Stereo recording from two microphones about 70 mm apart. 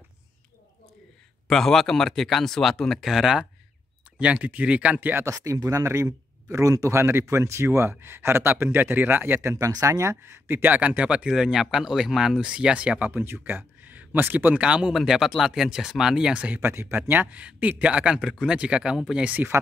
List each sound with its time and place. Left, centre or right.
1.5 s speech: centre
4.2 s speech: right
5.2 s speech: right
9.5 s speech: right; by 11.2 s centre
11.2 s speech: centre
15.0 s speech: centre
19.2 s speech: right